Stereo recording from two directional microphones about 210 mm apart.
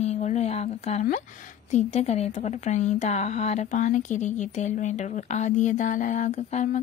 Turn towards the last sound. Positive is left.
turn(degrees=35)  # may be behind; listen again after turning